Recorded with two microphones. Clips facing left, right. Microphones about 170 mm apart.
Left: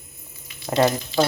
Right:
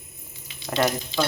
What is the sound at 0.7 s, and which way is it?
Speech, 30° left (ahead or behind).